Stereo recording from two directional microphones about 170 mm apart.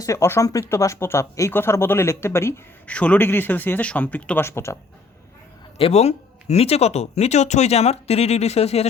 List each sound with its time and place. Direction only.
0.0 s speech: 15° left (ahead or behind)
5.7 s speech: 35° left (ahead or behind)